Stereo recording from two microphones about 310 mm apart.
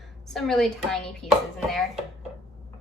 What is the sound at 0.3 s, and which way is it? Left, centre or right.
A woman's voice, centre.